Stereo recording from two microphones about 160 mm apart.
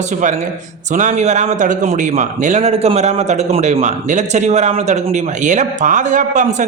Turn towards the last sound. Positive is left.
turn(degrees=-50)  # may be behind; listen again after turning